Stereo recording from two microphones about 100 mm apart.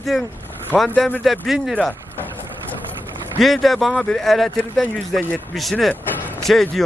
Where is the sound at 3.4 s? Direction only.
Centre (ahead or behind).